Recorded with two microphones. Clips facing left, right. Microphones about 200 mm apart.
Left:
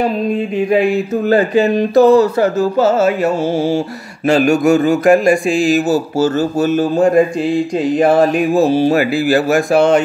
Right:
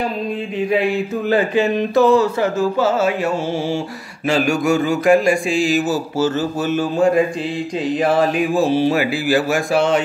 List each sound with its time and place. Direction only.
1.3 s speech: 40° left (ahead or behind)
4.3 s a man's voice: 45° left (ahead or behind)
8.0 s a man's voice: 45° left (ahead or behind)